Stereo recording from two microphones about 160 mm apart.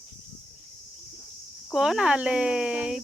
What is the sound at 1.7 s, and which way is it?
Speech, 5° right (ahead or behind).